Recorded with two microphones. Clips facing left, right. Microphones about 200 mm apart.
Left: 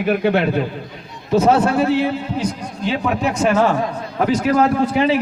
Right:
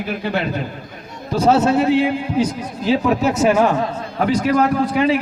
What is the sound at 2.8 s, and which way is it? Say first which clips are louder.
Speech: right 3 dB; 5° right (ahead or behind).